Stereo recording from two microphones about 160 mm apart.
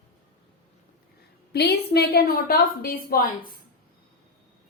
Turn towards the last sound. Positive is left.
turn(degrees=65)  # may be behind; listen again after turning